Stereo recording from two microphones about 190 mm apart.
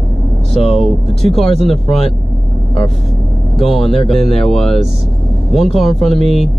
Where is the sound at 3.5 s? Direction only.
Centre (ahead or behind).